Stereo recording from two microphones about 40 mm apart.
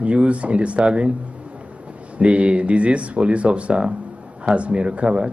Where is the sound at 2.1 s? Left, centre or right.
Right.